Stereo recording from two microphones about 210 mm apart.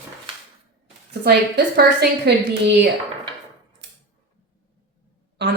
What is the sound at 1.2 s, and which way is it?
A woman's voice, 50° right (ahead or behind).